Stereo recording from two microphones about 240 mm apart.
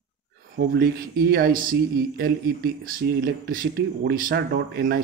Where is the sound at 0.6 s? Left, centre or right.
Right.